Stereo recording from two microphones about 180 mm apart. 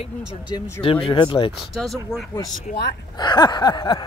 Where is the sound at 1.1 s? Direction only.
30° left (ahead or behind).